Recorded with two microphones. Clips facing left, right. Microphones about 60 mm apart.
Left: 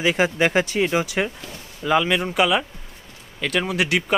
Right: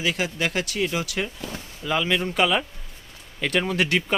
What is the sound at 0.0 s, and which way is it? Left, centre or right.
Speech, left.